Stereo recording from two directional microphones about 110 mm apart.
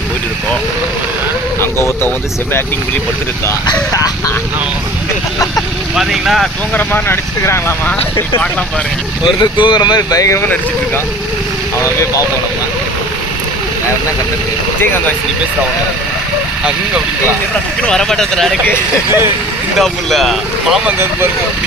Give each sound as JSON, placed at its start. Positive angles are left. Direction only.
{"t": 1.6, "sound": "speech", "side_deg": 20}
{"t": 5.9, "sound": "speech", "side_deg": 0}
{"t": 6.8, "sound": "speech", "side_deg": 20}
{"t": 9.2, "sound": "speech", "side_deg": 45}
{"t": 11.8, "sound": "speech", "side_deg": 30}
{"t": 17.8, "sound": "speech", "side_deg": 5}
{"t": 19.8, "sound": "speech", "side_deg": 0}